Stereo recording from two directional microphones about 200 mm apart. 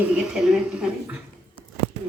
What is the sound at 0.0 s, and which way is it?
A woman's voice, 5° right (ahead or behind).